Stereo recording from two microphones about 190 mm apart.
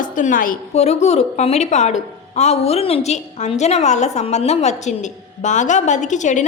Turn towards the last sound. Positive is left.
turn(degrees=40)  # may be behind; listen again after turning